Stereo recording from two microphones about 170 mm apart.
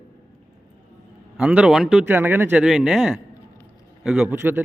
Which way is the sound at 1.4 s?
5° right (ahead or behind).